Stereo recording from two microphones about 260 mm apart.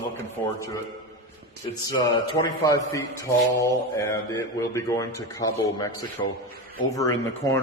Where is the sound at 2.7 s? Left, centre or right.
Centre.